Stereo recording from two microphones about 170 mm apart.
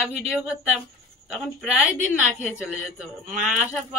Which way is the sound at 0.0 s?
5° right (ahead or behind).